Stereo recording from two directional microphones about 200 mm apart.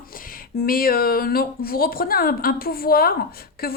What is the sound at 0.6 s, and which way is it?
A woman's voice, 45° left (ahead or behind).